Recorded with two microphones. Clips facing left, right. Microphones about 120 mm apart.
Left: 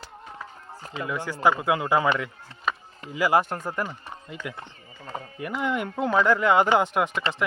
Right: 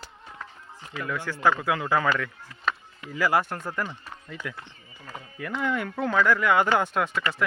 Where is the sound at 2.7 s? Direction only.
10° left (ahead or behind).